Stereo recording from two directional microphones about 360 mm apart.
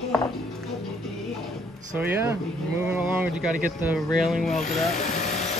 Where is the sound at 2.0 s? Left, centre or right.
Centre.